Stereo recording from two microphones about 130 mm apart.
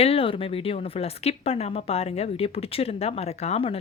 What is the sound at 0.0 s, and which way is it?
Speech, 45° left (ahead or behind).